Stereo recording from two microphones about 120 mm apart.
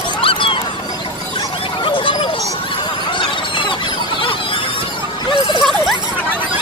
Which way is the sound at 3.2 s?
45° left (ahead or behind).